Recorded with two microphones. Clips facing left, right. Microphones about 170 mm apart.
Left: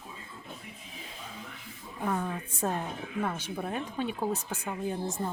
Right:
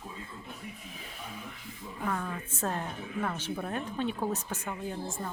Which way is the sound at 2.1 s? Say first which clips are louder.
Left 3 dB; 15° left (ahead or behind).